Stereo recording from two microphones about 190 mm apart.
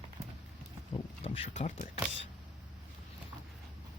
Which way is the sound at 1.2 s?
30° left (ahead or behind).